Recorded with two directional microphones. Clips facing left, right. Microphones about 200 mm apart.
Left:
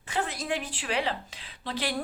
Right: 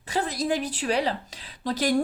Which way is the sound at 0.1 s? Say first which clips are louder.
Right 5 dB; 35° right (ahead or behind).